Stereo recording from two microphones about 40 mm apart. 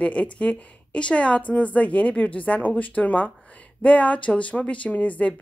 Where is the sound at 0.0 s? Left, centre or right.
Left.